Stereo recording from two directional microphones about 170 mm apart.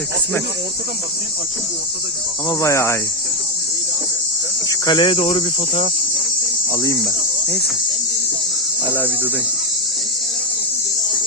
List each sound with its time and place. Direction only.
2.5 s speech: 20° left (ahead or behind)
4.7 s cricket: 25° left (ahead or behind)